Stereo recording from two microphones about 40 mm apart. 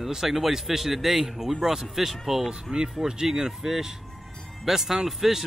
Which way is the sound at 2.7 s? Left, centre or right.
Right.